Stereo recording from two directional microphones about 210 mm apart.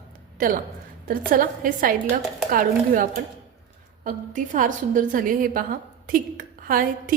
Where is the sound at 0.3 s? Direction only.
40° right (ahead or behind).